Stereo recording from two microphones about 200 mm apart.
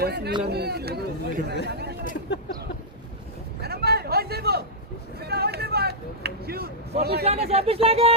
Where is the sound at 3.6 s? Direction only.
50° right (ahead or behind).